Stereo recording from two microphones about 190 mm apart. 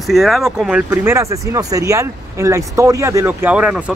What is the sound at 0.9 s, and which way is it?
Speech, 15° right (ahead or behind).